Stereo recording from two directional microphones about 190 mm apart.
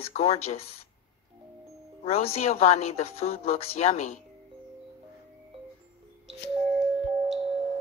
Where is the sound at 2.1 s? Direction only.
30° left (ahead or behind).